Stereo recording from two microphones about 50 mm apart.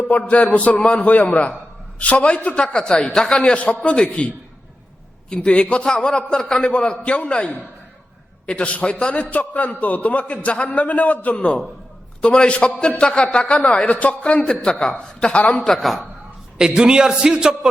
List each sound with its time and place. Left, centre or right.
0.0 s a man's voice: left
5.3 s a man's voice: centre
14.6 s a man's voice: centre
15.3 s a man's voice: left
15.7 s a man's voice: centre
16.6 s a man's voice: centre